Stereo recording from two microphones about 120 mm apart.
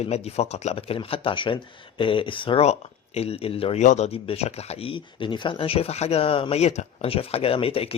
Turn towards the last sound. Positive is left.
turn(degrees=55)  # may be behind; listen again after turning